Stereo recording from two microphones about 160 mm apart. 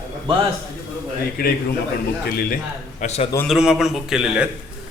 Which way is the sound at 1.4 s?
70° left (ahead or behind).